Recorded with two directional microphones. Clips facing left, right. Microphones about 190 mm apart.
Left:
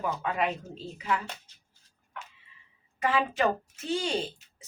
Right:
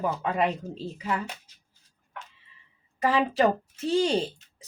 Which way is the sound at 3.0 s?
35° right (ahead or behind).